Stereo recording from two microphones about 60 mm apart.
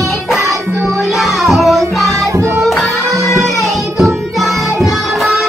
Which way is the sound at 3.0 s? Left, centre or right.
Right.